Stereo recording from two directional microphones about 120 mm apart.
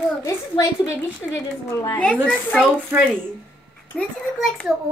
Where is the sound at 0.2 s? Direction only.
25° left (ahead or behind).